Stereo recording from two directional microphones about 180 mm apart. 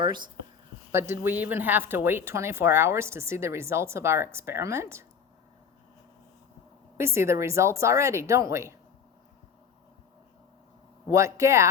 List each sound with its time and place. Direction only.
1.1 s speech: 10° right (ahead or behind)
6.9 s speech: 15° right (ahead or behind)
11.1 s speech: 15° right (ahead or behind)